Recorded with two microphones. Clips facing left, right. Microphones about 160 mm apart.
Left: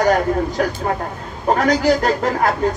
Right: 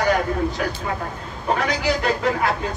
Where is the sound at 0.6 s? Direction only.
45° left (ahead or behind).